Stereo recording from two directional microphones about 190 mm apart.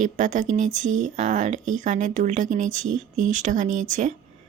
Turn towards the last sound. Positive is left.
turn(degrees=-40)  # may be behind; listen again after turning